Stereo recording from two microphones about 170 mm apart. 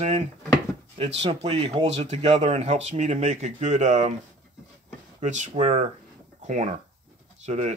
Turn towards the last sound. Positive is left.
turn(degrees=-40)  # may be behind; listen again after turning